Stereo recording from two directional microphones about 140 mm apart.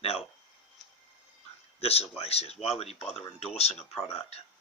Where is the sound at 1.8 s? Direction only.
45° left (ahead or behind).